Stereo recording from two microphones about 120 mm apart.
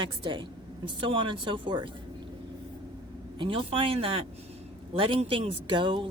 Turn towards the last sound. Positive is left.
turn(degrees=-45)  # may be behind; listen again after turning